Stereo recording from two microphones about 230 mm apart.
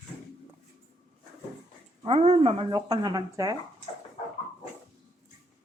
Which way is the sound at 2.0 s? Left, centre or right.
Right.